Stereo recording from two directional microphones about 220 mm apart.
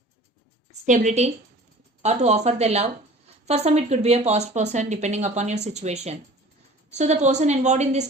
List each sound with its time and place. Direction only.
0.9 s speech: 35° right (ahead or behind)